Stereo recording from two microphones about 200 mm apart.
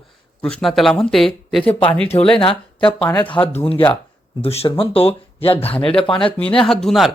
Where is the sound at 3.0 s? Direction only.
10° left (ahead or behind).